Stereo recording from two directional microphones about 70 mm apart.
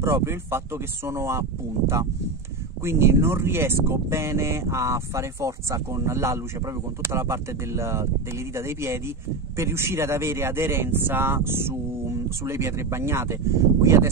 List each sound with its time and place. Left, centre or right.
0.0 s speech: right
2.8 s speech: right